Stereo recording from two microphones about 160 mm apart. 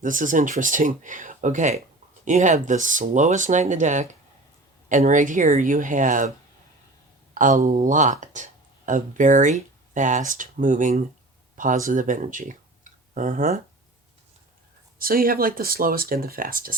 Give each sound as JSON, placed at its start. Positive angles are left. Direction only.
{"t": 0.0, "sound": "speech", "side_deg": -55}
{"t": 7.3, "sound": "speech", "side_deg": -55}
{"t": 14.9, "sound": "speech", "side_deg": -65}